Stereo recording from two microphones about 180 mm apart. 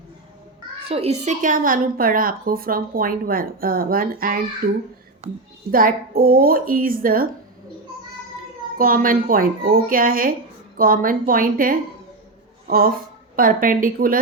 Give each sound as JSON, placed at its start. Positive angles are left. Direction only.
{"t": 0.9, "sound": "a woman's voice", "side_deg": -35}
{"t": 5.2, "sound": "a woman's voice", "side_deg": -40}
{"t": 5.7, "sound": "a woman's voice", "side_deg": -55}
{"t": 8.8, "sound": "a woman's voice", "side_deg": -50}